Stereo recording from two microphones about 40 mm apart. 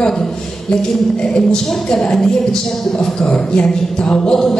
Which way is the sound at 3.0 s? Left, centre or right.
Left.